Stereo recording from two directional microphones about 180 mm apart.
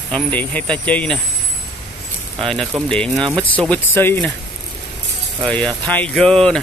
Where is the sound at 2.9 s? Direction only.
5° left (ahead or behind).